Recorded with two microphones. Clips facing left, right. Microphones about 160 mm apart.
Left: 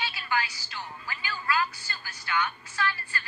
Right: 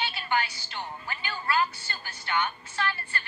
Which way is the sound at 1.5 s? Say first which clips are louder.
Right 2 dB; 30° right (ahead or behind).